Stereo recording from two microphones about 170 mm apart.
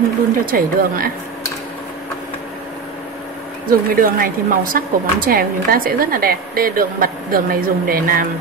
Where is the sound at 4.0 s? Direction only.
55° right (ahead or behind).